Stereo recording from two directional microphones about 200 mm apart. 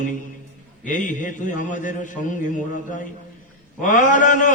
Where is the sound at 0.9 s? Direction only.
40° left (ahead or behind).